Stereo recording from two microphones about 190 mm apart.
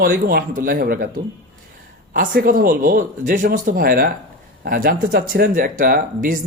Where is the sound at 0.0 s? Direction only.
50° right (ahead or behind).